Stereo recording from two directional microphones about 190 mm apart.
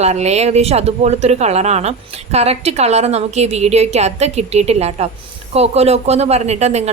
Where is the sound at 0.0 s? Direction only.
35° right (ahead or behind).